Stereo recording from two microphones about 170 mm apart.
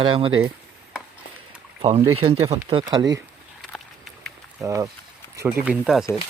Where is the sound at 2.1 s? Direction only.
35° right (ahead or behind).